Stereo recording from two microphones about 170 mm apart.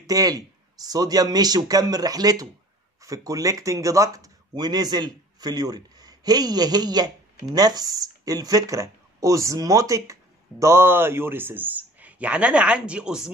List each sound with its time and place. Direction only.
0.0 s a man's voice: 20° right (ahead or behind); by 13.3 s 5° right (ahead or behind)